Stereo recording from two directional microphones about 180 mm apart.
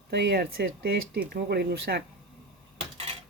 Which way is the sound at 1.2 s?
60° right (ahead or behind).